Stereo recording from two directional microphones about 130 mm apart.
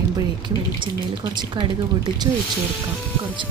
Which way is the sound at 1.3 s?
35° right (ahead or behind).